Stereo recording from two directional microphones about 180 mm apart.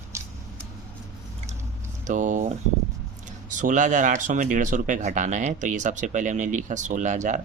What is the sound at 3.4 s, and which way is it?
Speech, 45° right (ahead or behind).